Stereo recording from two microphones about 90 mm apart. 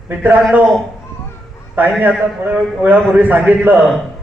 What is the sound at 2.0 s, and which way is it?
A man's voice, 20° right (ahead or behind).